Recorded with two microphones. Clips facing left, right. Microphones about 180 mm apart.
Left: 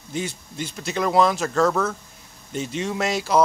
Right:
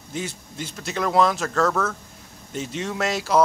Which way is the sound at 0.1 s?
Centre (ahead or behind).